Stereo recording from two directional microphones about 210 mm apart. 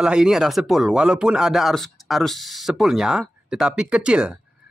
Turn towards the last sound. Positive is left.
turn(degrees=-5)  # may be behind; listen again after turning